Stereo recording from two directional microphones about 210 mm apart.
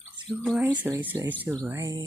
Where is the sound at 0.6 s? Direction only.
15° right (ahead or behind).